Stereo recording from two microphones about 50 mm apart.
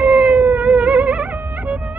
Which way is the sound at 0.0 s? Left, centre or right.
Right.